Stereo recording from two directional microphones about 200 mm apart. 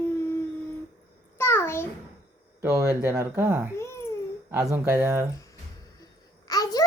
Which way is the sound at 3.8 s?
15° left (ahead or behind).